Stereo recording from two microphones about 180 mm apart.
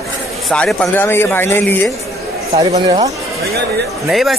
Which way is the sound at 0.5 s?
5° left (ahead or behind).